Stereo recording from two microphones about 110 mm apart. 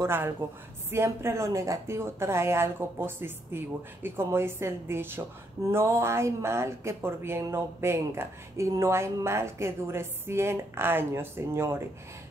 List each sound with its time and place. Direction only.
0.4 s speech: 20° right (ahead or behind)